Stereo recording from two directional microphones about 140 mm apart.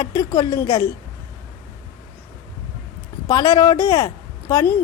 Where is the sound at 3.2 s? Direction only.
25° left (ahead or behind).